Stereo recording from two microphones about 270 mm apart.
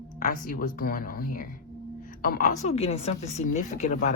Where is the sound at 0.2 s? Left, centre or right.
Left.